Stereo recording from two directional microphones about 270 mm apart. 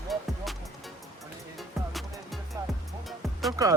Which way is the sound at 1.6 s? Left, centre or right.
Centre.